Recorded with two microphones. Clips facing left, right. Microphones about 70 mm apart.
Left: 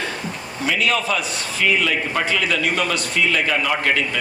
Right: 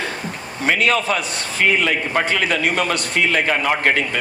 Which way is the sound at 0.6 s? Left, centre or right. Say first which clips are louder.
Right 3 dB; right.